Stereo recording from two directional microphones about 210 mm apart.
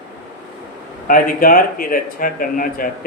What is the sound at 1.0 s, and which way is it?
Speech, 40° left (ahead or behind).